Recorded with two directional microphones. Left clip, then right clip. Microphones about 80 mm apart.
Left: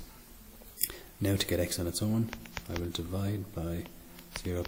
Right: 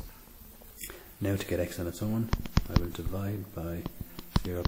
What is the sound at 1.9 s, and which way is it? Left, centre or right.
Speech, left.